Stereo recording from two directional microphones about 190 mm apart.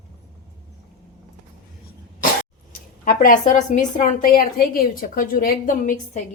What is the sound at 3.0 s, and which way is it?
A woman's voice, 50° left (ahead or behind).